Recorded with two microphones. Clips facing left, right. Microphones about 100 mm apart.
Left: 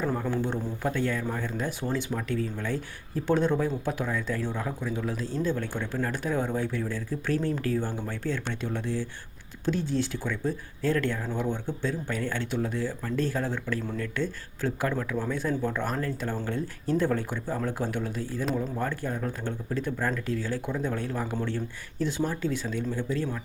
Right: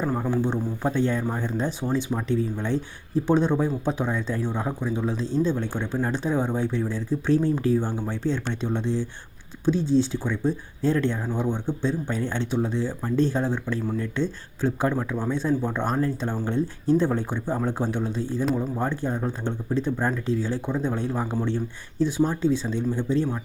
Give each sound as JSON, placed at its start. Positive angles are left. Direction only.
{"t": 0.0, "sound": "speech", "side_deg": -15}